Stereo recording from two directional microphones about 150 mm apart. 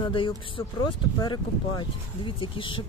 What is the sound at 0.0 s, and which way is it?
Speech, 35° left (ahead or behind).